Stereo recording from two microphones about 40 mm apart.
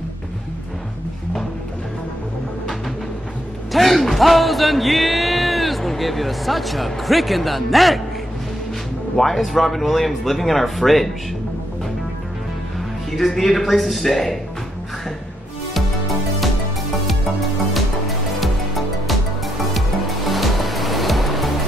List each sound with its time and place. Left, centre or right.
3.7 s music: centre
9.1 s speech: centre
13.3 s speech: centre
17.7 s music: centre